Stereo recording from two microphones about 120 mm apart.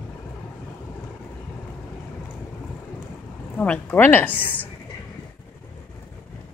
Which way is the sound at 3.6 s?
15° left (ahead or behind).